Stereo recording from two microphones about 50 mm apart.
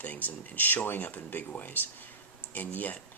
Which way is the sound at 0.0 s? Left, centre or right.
Left.